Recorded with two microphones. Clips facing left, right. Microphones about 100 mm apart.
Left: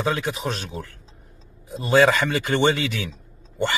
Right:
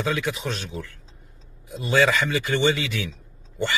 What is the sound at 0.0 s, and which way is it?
A man's voice, 40° left (ahead or behind).